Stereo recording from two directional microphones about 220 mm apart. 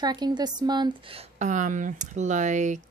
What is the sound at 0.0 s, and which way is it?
A woman's voice, 20° right (ahead or behind).